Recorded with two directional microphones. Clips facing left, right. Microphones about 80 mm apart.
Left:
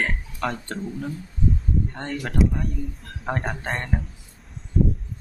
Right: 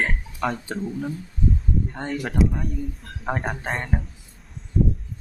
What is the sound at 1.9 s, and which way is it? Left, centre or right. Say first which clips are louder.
Speech: right 2 dB; centre.